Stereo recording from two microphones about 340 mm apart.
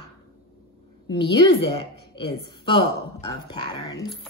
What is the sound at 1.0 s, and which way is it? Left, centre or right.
A woman's voice, centre.